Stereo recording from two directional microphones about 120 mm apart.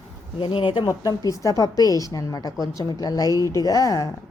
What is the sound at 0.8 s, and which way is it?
A woman's voice, 30° left (ahead or behind).